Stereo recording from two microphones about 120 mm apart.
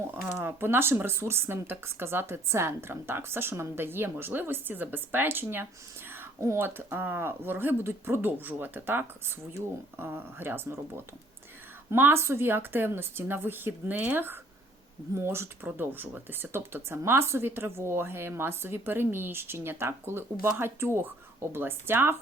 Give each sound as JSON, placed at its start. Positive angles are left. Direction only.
{"t": 0.1, "sound": "speech", "side_deg": -20}